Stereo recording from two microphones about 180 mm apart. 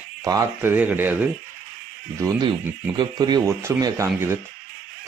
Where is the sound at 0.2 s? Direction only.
15° right (ahead or behind).